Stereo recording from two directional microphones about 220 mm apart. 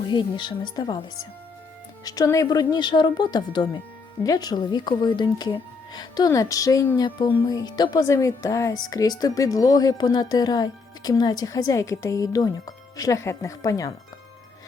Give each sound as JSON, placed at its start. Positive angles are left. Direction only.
{"t": 0.1, "sound": "speech", "side_deg": 20}
{"t": 2.0, "sound": "speech", "side_deg": 15}